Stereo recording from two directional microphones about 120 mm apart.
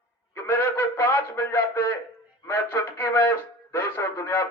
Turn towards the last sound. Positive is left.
turn(degrees=20)  # may be behind; listen again after turning